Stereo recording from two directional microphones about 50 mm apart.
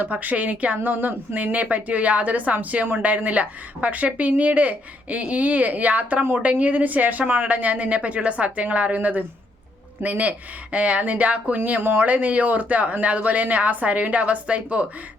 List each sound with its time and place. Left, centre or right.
0.0 s a woman's voice: right